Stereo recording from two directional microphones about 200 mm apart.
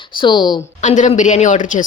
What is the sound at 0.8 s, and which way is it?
A man's voice, 40° left (ahead or behind).